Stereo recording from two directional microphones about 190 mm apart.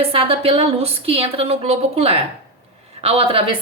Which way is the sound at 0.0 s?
30° right (ahead or behind).